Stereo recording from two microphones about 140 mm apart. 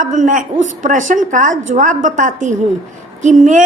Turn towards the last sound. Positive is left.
turn(degrees=-60)  # may be behind; listen again after turning